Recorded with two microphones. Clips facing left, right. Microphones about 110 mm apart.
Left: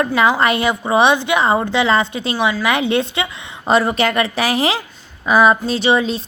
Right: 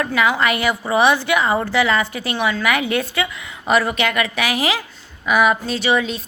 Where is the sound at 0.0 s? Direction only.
30° left (ahead or behind).